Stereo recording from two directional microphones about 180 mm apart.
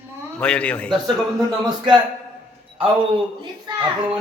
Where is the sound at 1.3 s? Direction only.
20° right (ahead or behind).